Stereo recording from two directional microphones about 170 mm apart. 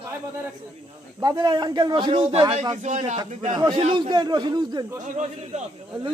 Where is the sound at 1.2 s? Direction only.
25° right (ahead or behind).